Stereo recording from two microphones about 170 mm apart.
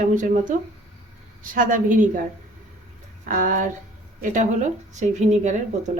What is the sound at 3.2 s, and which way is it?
A woman's voice, 55° right (ahead or behind).